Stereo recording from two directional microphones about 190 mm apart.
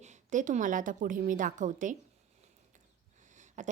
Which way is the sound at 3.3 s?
40° right (ahead or behind).